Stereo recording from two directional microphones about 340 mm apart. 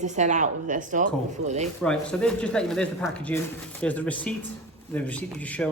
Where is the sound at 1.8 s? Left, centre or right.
Centre.